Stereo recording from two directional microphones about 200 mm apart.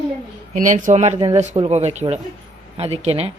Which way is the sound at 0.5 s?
40° right (ahead or behind).